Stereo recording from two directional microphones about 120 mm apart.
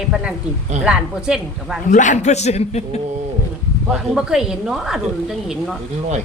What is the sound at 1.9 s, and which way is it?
A man's voice, 90° left.